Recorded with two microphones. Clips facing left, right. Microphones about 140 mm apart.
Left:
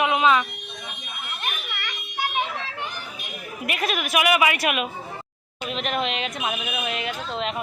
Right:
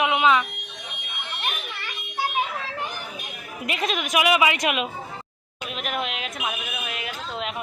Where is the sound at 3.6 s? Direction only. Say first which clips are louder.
Even; 25° right (ahead or behind).